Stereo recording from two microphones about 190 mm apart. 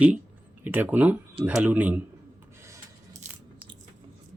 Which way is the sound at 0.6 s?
10° right (ahead or behind).